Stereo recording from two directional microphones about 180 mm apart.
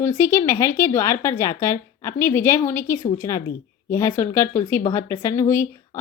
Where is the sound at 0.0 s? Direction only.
15° left (ahead or behind).